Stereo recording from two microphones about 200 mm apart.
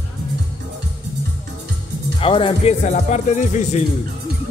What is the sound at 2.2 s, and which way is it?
Speech, 25° left (ahead or behind).